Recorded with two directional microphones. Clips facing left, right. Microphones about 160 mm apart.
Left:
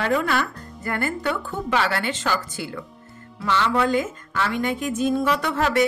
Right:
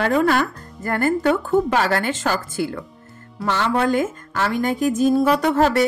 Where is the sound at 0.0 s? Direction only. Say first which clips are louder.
Right 4 dB; 45° right (ahead or behind).